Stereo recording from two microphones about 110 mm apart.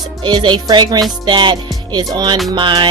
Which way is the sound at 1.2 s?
45° right (ahead or behind).